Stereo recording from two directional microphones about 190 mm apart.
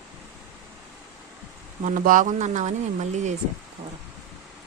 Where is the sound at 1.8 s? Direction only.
45° right (ahead or behind).